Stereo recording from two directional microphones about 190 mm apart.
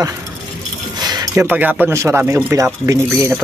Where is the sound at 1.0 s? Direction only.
20° right (ahead or behind).